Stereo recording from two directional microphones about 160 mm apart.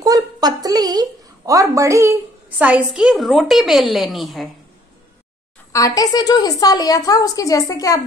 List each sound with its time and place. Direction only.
0.0 s a sound: 25° right (ahead or behind)
2.6 s a woman's voice: 10° right (ahead or behind)
5.7 s a woman's voice: 20° left (ahead or behind)